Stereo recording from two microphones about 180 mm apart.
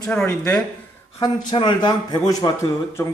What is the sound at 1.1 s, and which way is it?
A man's voice, 25° left (ahead or behind).